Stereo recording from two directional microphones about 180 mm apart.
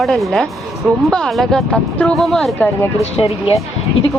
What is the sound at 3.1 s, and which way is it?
Speech, 30° left (ahead or behind).